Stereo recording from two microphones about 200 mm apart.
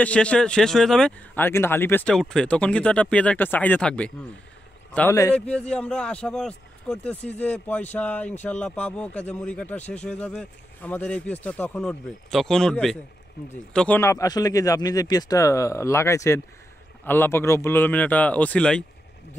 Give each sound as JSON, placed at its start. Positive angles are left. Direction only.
{"t": 0.0, "sound": "speech", "side_deg": 5}